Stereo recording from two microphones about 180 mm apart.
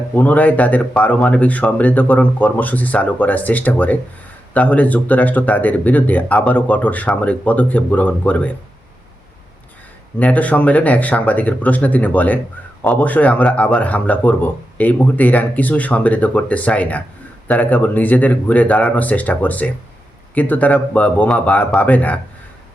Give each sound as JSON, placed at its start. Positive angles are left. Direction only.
{"t": 0.2, "sound": "a man's voice", "side_deg": 10}
{"t": 10.2, "sound": "a man's voice", "side_deg": 10}